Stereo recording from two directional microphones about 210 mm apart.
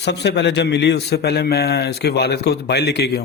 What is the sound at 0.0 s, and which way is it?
A man's voice, 55° left (ahead or behind).